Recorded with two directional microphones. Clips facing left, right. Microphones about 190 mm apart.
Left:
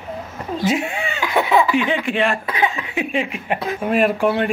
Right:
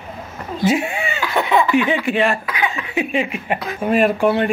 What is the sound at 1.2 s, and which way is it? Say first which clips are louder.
Laughter: left 1 dB; 10° left (ahead or behind).